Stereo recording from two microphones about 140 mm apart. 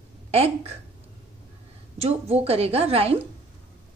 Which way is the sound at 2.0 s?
50° right (ahead or behind).